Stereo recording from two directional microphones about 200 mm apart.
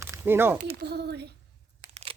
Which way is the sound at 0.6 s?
50° right (ahead or behind).